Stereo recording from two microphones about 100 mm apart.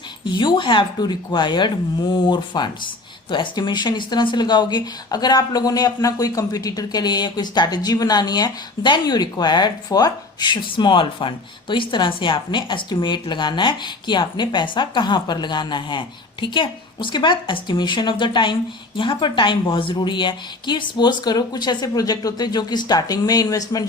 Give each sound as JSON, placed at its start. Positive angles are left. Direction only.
{"t": 0.3, "sound": "speech", "side_deg": 50}